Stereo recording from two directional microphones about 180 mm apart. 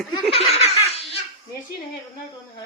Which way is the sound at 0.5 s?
35° left (ahead or behind).